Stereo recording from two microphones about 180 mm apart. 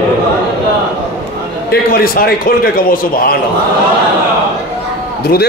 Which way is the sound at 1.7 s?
55° left (ahead or behind).